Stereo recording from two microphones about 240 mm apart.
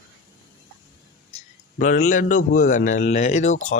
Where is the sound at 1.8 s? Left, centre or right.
Left.